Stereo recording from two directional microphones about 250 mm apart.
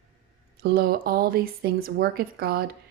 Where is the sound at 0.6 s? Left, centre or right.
Right.